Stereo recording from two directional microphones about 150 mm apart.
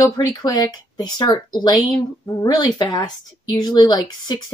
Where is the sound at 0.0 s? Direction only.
25° left (ahead or behind).